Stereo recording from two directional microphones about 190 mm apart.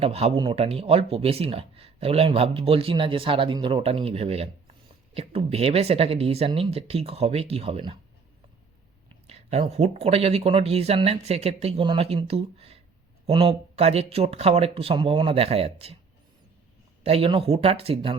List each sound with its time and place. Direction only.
0.0 s speech: 30° right (ahead or behind)
9.2 s speech: 35° right (ahead or behind)
17.0 s speech: 30° right (ahead or behind)